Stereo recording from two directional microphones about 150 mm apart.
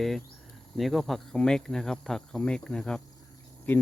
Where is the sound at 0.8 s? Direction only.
Centre (ahead or behind).